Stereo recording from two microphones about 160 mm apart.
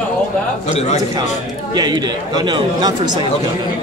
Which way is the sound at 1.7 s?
25° right (ahead or behind).